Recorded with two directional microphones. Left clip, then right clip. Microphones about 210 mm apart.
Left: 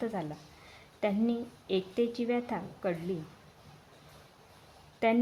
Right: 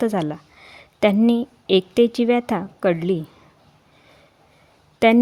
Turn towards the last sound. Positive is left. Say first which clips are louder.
# right 13 dB
turn(degrees=-50)  # may be behind; listen again after turning